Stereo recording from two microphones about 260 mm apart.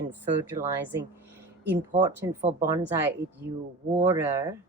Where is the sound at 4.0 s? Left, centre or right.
Centre.